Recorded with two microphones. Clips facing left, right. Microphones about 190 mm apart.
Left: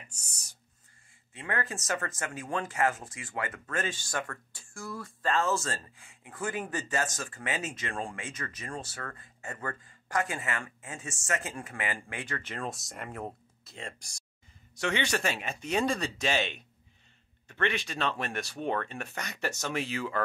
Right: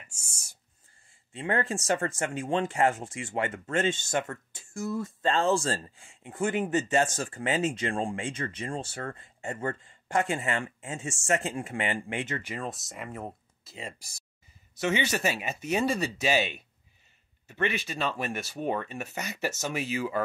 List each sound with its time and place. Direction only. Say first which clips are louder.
1.3 s speech: right 6 dB; 30° right (ahead or behind)
12.4 s speech: right 1 dB; centre (ahead or behind)